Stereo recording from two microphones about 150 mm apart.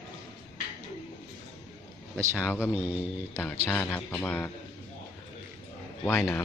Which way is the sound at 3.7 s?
10° left (ahead or behind).